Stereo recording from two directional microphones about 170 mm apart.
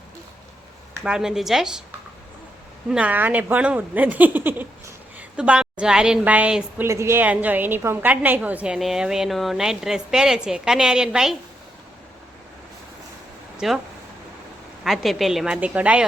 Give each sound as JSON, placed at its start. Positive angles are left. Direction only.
{"t": 1.0, "sound": "a woman's voice", "side_deg": -5}
{"t": 2.9, "sound": "a woman's voice", "side_deg": -10}
{"t": 13.6, "sound": "a woman's voice", "side_deg": 0}
{"t": 14.8, "sound": "a woman's voice", "side_deg": 0}